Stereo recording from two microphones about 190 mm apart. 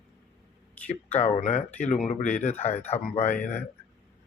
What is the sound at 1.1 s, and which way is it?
Speech, 35° left (ahead or behind).